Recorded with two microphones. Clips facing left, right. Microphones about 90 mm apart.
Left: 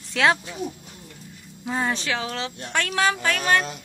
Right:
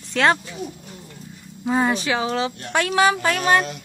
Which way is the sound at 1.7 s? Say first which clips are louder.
Right 5 dB; 10° right (ahead or behind).